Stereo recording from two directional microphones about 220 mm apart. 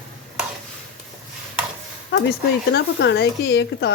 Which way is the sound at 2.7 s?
50° left (ahead or behind).